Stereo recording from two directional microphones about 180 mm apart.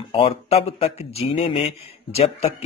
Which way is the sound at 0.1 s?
35° left (ahead or behind).